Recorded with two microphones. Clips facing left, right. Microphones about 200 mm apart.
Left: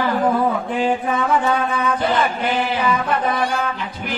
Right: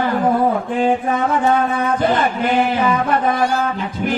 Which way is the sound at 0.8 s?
45° right (ahead or behind).